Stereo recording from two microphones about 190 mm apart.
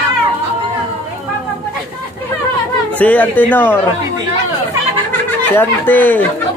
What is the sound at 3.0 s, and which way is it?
Speech, 10° left (ahead or behind).